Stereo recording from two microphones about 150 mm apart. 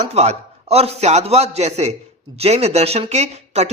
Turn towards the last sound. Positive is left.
turn(degrees=-45)  # may be behind; listen again after turning